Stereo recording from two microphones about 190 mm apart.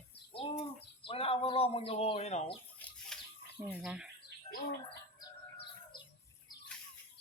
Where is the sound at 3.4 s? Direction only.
55° left (ahead or behind).